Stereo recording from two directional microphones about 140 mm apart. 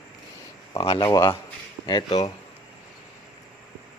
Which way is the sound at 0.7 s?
35° left (ahead or behind).